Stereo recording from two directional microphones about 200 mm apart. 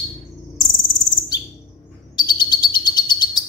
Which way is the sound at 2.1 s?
20° left (ahead or behind).